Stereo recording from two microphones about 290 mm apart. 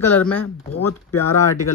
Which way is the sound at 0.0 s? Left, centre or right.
Centre.